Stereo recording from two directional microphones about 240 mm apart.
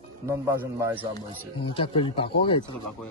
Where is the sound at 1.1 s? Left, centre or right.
Left.